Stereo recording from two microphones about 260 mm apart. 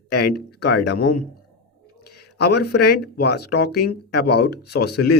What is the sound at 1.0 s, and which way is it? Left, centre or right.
Speech, left.